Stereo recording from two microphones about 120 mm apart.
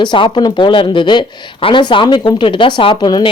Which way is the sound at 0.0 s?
40° left (ahead or behind).